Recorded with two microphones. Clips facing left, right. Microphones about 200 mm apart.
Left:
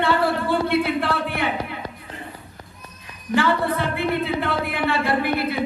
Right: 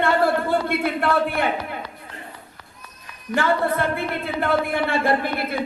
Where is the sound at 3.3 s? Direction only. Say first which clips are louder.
Even; 50° right (ahead or behind).